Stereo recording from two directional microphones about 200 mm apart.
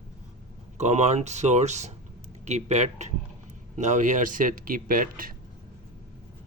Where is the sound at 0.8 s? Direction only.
35° right (ahead or behind).